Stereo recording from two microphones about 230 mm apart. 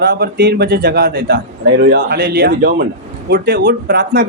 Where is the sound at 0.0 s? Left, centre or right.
Right.